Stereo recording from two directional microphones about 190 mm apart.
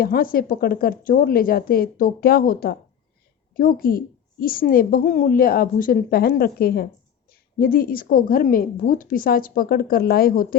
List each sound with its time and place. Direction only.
0.0 s a woman's voice: 50° left (ahead or behind)